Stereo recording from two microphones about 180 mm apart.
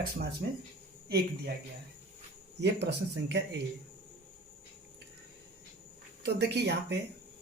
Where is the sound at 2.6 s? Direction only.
70° right (ahead or behind).